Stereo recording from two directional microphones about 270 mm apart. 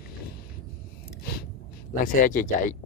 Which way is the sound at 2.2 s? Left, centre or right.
Left.